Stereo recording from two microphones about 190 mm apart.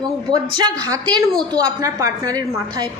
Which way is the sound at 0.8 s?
20° right (ahead or behind).